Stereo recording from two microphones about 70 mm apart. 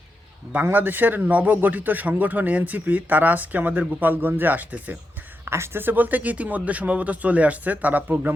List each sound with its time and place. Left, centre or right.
0.5 s a man's voice: right
5.5 s a man's voice: right